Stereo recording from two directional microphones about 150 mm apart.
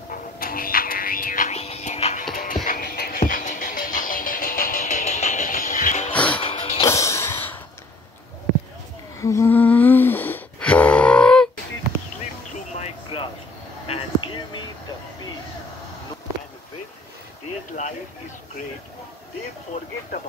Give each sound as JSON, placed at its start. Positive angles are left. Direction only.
{"t": 0.1, "sound": "music", "side_deg": 75}
{"t": 1.6, "sound": "music", "side_deg": 45}
{"t": 2.3, "sound": "music", "side_deg": 65}
{"t": 6.1, "sound": "music", "side_deg": 10}
{"t": 6.4, "sound": "music", "side_deg": 40}
{"t": 6.8, "sound": "music", "side_deg": 20}
{"t": 9.2, "sound": "humming", "side_deg": 20}
{"t": 13.1, "sound": "a sound", "side_deg": 35}
{"t": 13.8, "sound": "basketball bounce", "side_deg": 35}